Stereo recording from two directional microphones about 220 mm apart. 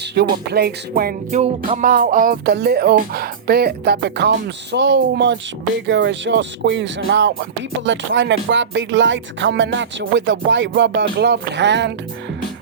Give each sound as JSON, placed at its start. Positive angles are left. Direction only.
{"t": 0.5, "sound": "music", "side_deg": -45}